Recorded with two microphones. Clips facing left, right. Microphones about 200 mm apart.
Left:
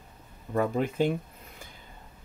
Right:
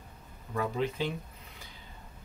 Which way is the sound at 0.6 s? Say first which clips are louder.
Left 5 dB; 50° left (ahead or behind).